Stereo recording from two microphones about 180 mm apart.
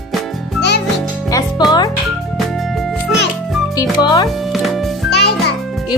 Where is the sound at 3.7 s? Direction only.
20° left (ahead or behind).